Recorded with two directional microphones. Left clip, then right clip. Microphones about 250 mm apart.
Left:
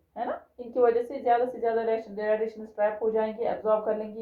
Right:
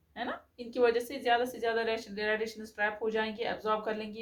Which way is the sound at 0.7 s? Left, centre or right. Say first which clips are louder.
Left 5 dB; right.